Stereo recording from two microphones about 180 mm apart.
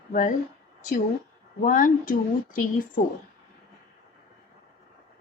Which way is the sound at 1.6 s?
45° left (ahead or behind).